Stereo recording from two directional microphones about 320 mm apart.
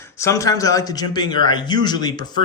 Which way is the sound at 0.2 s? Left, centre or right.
Centre.